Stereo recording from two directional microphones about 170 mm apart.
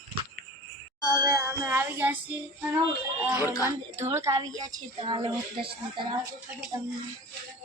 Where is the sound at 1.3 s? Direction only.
15° right (ahead or behind).